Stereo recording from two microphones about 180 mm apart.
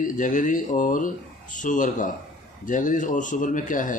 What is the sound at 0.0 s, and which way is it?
Speech, 45° left (ahead or behind).